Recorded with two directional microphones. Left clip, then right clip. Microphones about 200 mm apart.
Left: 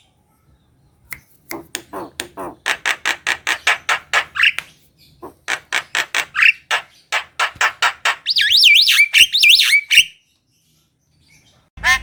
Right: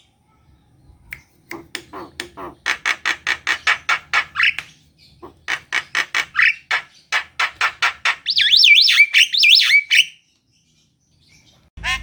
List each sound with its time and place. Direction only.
1.5 s a sound: 25° left (ahead or behind)
5.2 s squawk: 25° left (ahead or behind)
9.3 s alarm: 25° left (ahead or behind)